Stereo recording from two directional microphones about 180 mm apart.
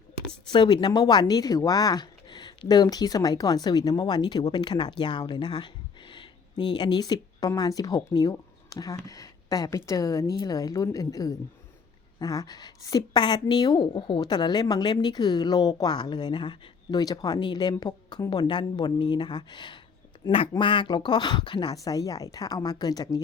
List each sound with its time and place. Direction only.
0.4 s a woman's voice: 25° left (ahead or behind)